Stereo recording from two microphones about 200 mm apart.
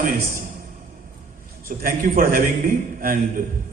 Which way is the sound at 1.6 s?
45° right (ahead or behind).